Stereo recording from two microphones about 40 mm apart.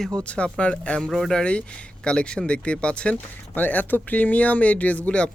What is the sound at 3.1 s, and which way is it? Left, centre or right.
Speech, left.